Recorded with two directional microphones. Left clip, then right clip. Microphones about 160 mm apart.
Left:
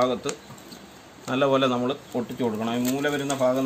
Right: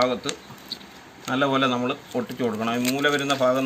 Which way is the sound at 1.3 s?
25° left (ahead or behind).